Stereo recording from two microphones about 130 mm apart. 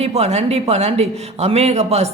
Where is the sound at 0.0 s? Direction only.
55° right (ahead or behind).